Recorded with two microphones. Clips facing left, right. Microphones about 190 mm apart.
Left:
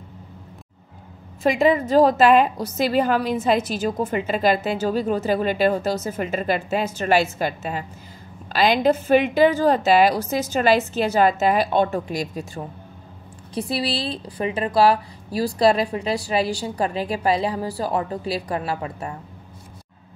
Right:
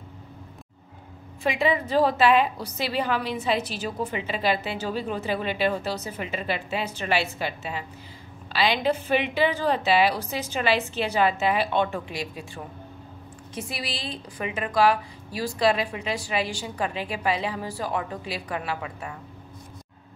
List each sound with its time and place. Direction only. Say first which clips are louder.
1.4 s a woman's voice: left 6 dB; 40° left (ahead or behind)